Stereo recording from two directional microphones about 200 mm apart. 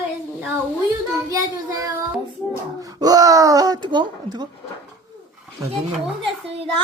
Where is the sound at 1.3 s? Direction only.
15° right (ahead or behind).